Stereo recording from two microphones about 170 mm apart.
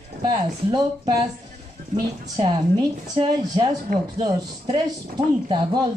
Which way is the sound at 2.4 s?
25° right (ahead or behind).